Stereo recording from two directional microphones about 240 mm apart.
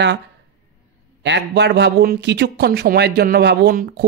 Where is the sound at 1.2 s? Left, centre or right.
Right.